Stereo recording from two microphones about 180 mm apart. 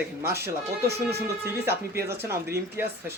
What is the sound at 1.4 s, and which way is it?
Speech, 15° right (ahead or behind).